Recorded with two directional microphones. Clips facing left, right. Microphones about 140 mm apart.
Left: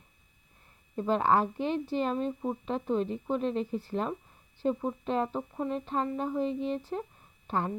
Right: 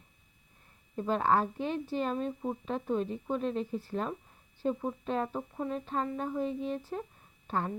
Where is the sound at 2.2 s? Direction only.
25° left (ahead or behind).